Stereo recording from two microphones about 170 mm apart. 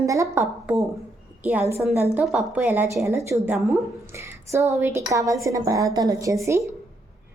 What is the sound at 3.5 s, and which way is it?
Speech, centre (ahead or behind).